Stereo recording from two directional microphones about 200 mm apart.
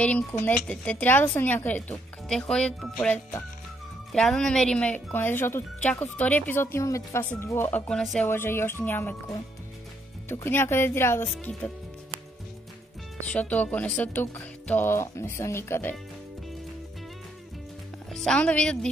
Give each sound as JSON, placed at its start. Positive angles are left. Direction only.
{"t": 0.0, "sound": "speech", "side_deg": 10}
{"t": 13.2, "sound": "speech", "side_deg": 5}
{"t": 18.1, "sound": "a woman's voice", "side_deg": 5}